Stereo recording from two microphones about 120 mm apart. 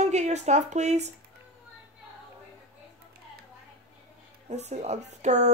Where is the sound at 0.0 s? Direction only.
70° right (ahead or behind).